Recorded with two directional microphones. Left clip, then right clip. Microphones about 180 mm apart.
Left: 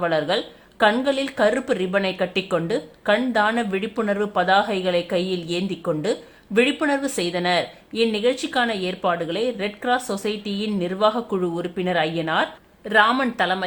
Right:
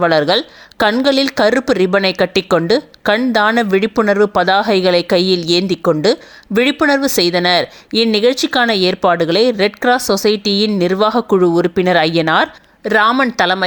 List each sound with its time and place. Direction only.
0.0 s speech: 45° right (ahead or behind)
13.1 s speech: 25° right (ahead or behind)
13.4 s speech: 35° right (ahead or behind)